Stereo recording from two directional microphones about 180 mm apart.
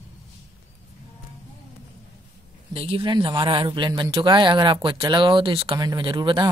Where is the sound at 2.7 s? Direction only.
30° right (ahead or behind).